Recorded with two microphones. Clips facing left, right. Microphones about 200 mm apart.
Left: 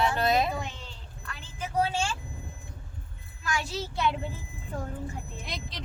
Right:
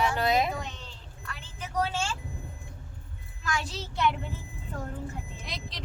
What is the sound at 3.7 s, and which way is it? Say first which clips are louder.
Speech: left 2 dB; 10° left (ahead or behind).